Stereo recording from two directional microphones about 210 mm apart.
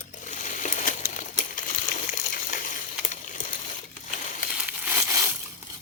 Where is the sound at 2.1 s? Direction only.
40° left (ahead or behind).